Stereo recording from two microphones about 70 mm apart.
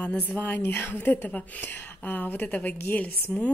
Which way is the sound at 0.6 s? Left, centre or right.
Left.